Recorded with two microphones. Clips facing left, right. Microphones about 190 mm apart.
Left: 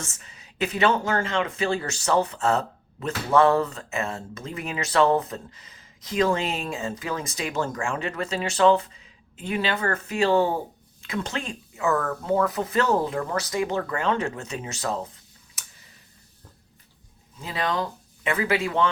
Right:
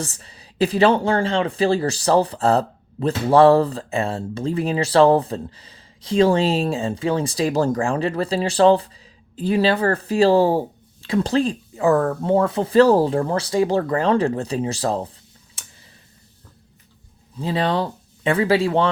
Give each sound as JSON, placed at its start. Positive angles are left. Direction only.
{"t": 0.0, "sound": "speech", "side_deg": -35}
{"t": 15.6, "sound": "tick", "side_deg": -30}
{"t": 17.3, "sound": "speech", "side_deg": -30}